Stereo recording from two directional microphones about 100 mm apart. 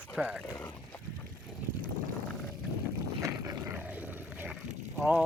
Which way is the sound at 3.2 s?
35° right (ahead or behind).